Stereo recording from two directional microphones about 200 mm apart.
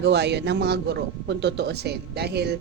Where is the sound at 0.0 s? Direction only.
55° right (ahead or behind).